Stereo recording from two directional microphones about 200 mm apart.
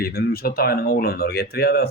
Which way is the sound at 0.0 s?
50° left (ahead or behind).